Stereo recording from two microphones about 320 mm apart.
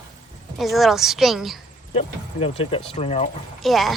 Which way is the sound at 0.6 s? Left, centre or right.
Centre.